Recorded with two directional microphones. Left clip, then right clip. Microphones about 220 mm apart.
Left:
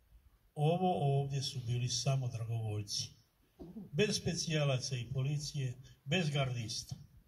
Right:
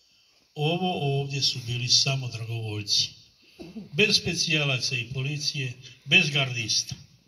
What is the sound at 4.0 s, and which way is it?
A man's voice, 25° left (ahead or behind).